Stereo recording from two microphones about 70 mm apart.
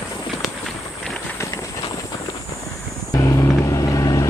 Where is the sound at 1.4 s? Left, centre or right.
Left.